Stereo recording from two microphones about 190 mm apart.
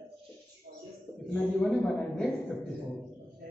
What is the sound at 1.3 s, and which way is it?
A man's voice, 5° left (ahead or behind).